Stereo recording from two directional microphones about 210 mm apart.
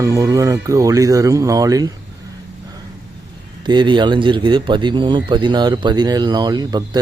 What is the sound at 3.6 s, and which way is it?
A man's voice, 20° right (ahead or behind).